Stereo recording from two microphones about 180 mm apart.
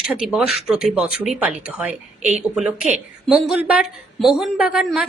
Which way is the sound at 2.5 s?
5° right (ahead or behind).